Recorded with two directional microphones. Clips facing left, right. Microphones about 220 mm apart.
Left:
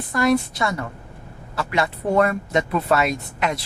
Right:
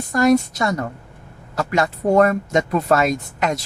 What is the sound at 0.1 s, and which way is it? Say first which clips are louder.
Speech: right 4 dB; 45° right (ahead or behind).